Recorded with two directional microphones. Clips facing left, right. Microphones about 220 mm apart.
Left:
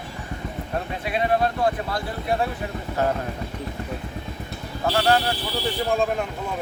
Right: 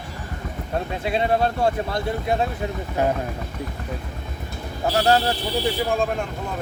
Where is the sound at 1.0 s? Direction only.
25° right (ahead or behind).